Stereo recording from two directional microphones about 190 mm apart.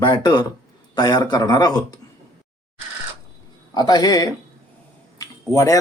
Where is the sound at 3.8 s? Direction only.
20° left (ahead or behind).